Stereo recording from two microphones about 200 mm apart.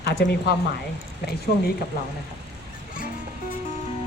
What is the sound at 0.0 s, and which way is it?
Speech, 55° left (ahead or behind).